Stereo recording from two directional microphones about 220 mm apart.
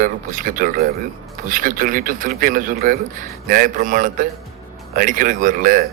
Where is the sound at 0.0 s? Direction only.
35° right (ahead or behind).